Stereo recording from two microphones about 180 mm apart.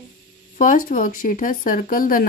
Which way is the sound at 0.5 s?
45° left (ahead or behind).